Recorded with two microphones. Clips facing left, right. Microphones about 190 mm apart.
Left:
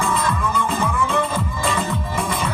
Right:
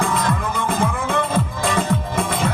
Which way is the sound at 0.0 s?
55° right (ahead or behind).